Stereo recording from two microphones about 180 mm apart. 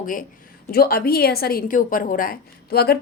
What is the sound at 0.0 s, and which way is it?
A woman's voice, 50° left (ahead or behind).